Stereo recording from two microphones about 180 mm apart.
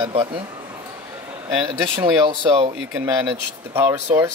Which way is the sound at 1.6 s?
25° right (ahead or behind).